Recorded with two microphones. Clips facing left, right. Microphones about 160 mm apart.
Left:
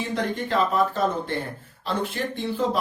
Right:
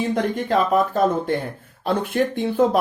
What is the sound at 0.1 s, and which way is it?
Speech, 50° right (ahead or behind).